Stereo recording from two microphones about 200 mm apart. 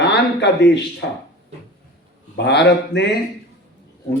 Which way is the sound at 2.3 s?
60° left (ahead or behind).